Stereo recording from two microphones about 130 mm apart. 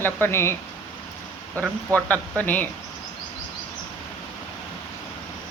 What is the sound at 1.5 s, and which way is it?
Speech, 20° right (ahead or behind).